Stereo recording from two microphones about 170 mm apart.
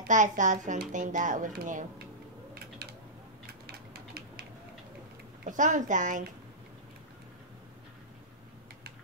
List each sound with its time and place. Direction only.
0.1 s speech: 45° right (ahead or behind)
3.6 s a sound: 70° right (ahead or behind)
5.4 s speech: 50° right (ahead or behind)